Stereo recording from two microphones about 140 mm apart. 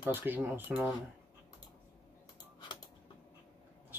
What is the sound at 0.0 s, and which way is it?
Speech, 15° right (ahead or behind).